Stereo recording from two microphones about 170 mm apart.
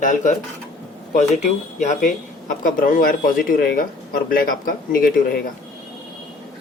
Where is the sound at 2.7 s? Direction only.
55° left (ahead or behind).